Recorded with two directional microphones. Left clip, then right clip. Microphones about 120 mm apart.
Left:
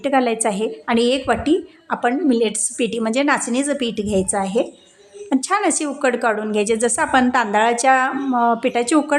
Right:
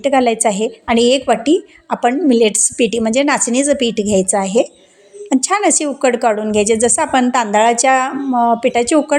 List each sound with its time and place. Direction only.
0.0 s a woman's voice: 30° right (ahead or behind)
8.3 s a woman's voice: 20° right (ahead or behind)